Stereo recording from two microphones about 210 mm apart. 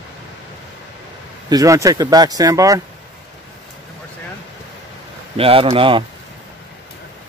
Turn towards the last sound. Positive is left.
turn(degrees=-25)  # may be behind; listen again after turning